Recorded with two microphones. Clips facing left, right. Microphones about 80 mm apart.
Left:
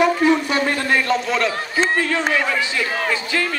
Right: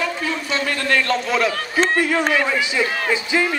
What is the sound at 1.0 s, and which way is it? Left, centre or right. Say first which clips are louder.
A man's voice: even; centre.